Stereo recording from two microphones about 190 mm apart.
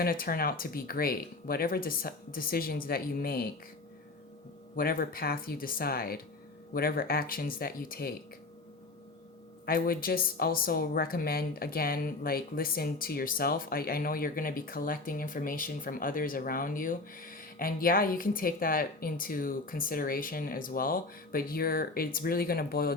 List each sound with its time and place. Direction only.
0.0 s speech: 50° left (ahead or behind)
4.7 s speech: 50° left (ahead or behind)
9.6 s speech: 50° left (ahead or behind)